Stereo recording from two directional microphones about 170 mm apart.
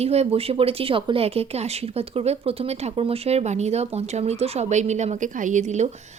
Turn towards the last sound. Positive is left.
turn(degrees=-45)  # may be behind; listen again after turning